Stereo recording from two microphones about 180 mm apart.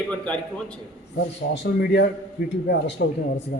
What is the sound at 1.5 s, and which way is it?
Speech, 70° left (ahead or behind).